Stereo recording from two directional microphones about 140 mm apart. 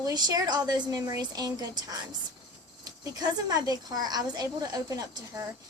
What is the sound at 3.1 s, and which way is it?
A woman's voice, 25° right (ahead or behind).